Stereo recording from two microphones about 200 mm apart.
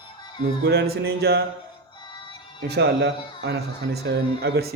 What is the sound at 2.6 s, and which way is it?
Speech, 55° right (ahead or behind).